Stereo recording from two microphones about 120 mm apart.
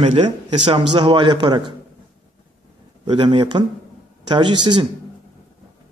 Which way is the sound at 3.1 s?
45° right (ahead or behind).